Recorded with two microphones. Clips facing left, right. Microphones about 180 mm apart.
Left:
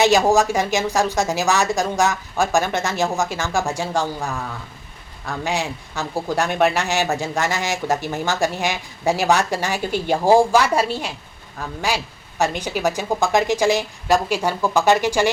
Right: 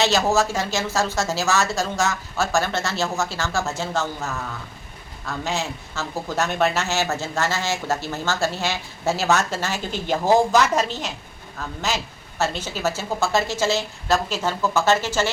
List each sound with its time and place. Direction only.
0.0 s speech: 15° left (ahead or behind)
5.5 s speech: 15° left (ahead or behind)